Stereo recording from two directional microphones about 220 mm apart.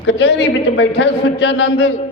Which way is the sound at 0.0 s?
50° left (ahead or behind).